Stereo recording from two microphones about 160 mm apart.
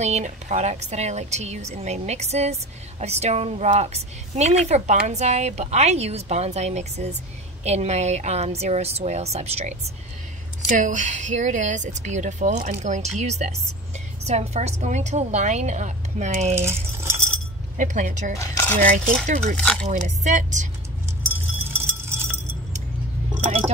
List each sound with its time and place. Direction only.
0.0 s a woman's voice: 45° right (ahead or behind)
10.8 s a woman's voice: 50° right (ahead or behind)
16.5 s speech: 15° right (ahead or behind)
17.7 s a woman's voice: 50° right (ahead or behind)
18.4 s speech: 15° left (ahead or behind)
18.8 s a woman's voice: 55° right (ahead or behind)
19.5 s speech: 5° left (ahead or behind)
19.9 s a woman's voice: 50° right (ahead or behind)